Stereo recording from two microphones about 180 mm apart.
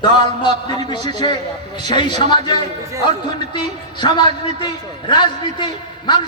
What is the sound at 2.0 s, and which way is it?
Speech, 25° left (ahead or behind).